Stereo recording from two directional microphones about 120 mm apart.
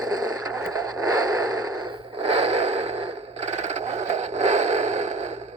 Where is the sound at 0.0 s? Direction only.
30° right (ahead or behind).